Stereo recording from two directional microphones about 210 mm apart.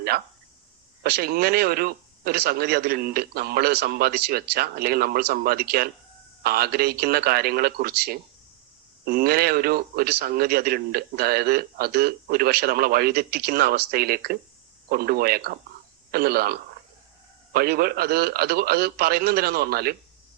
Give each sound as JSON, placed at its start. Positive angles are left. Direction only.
{"t": 1.0, "sound": "speech", "side_deg": -45}